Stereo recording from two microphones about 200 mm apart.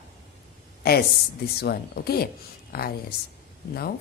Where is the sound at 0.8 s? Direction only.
50° left (ahead or behind).